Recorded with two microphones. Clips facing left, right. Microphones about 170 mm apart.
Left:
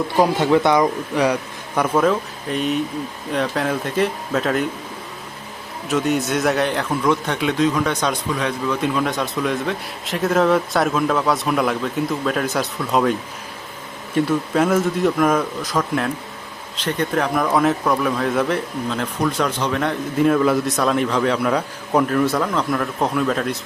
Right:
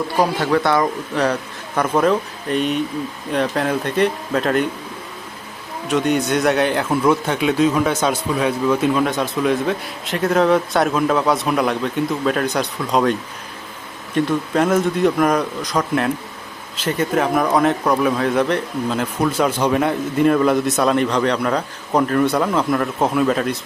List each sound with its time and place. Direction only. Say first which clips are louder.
0.3 s a man's voice: left 2 dB; 20° left (ahead or behind)
1.9 s a man's voice: right 2 dB; centre (ahead or behind)
5.9 s a man's voice: right 2 dB; centre (ahead or behind)
14.2 s a man's voice: even; 5° left (ahead or behind)
20.1 s a man's voice: right 1 dB; centre (ahead or behind)